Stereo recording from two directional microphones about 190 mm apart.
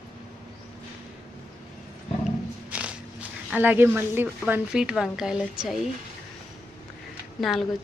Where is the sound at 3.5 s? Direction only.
10° right (ahead or behind).